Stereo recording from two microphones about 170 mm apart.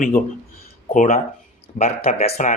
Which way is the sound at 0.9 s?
50° left (ahead or behind).